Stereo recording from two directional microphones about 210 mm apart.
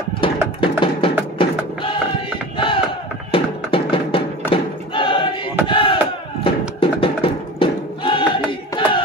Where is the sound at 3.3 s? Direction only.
25° left (ahead or behind).